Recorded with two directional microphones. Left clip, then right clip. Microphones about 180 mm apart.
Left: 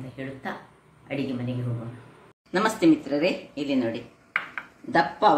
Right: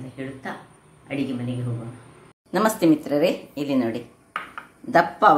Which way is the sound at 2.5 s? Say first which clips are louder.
Right 2 dB; 50° right (ahead or behind).